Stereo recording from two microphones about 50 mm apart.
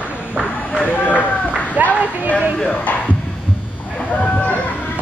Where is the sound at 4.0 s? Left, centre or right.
Left.